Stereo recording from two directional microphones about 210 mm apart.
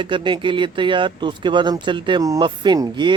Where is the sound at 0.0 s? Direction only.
25° right (ahead or behind).